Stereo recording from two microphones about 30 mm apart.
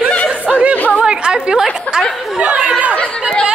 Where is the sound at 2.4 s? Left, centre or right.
Right.